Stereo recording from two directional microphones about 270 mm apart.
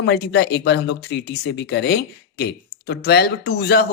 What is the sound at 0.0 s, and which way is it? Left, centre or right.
Speech, left.